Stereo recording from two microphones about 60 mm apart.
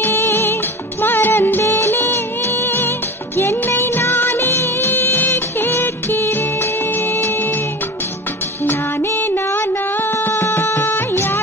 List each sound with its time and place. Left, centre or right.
0.0 s music: left
3.3 s music of bollywood: left
8.6 s music: left